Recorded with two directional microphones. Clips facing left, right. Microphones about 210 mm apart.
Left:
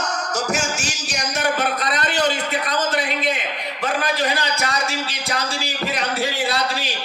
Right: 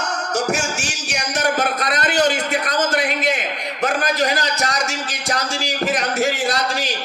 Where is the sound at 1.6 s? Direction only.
50° right (ahead or behind).